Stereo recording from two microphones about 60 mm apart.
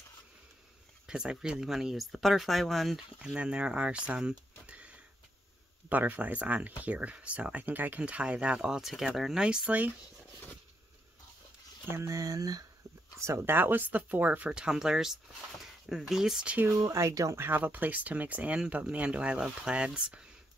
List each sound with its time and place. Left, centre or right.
1.0 s speech: centre
3.3 s speech: centre
4.6 s sniff: right
5.9 s speech: right; by 9.4 s centre
9.4 s speech: centre
11.9 s speech: right
12.2 s speech: right
13.2 s speech: right
13.5 s speech: right
14.5 s speech: centre
16.7 s speech: right
17.4 s speech: right; by 20.2 s centre